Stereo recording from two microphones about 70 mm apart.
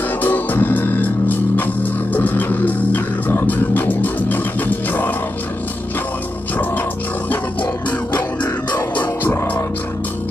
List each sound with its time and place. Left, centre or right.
0.2 s music: left
8.9 s music: left